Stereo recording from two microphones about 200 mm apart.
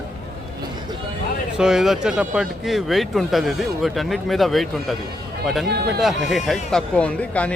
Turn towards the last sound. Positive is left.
turn(degrees=5)  # may be behind; listen again after turning